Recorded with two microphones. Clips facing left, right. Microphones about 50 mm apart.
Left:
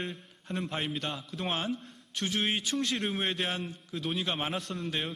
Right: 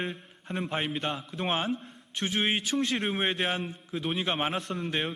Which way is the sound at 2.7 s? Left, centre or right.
Centre.